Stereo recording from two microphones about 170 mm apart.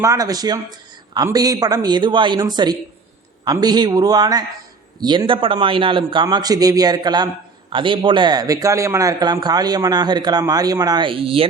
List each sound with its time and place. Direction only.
0.0 s speech: 20° right (ahead or behind)